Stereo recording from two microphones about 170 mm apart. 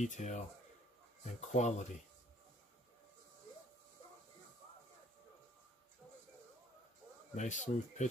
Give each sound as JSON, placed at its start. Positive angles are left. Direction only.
{"t": 0.0, "sound": "speech", "side_deg": 45}
{"t": 7.3, "sound": "speech", "side_deg": 45}